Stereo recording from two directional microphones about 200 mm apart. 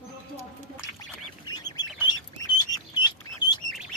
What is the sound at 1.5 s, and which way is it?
Bird, 20° left (ahead or behind).